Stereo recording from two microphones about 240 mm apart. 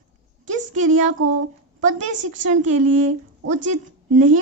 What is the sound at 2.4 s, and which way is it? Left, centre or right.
Speech, right.